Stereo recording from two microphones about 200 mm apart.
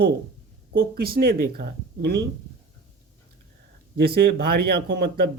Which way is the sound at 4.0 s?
50° right (ahead or behind).